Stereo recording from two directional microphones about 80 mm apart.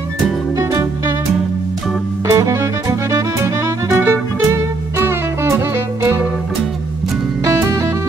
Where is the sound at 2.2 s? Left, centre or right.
Right.